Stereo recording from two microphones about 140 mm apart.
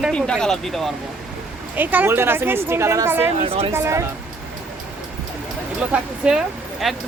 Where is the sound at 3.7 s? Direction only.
20° right (ahead or behind).